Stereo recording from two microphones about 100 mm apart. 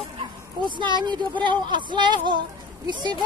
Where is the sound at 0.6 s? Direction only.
50° right (ahead or behind).